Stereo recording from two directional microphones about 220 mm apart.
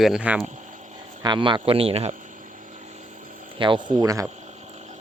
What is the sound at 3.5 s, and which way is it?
Speech, 20° right (ahead or behind).